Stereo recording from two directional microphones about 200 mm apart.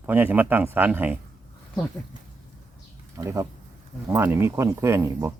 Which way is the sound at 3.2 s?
15° right (ahead or behind).